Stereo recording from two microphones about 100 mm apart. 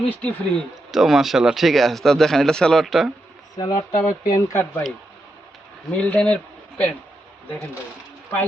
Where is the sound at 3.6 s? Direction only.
35° left (ahead or behind).